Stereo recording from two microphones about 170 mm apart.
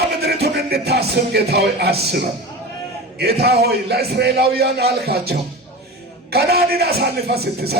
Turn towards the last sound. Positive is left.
turn(degrees=-70)  # may be behind; listen again after turning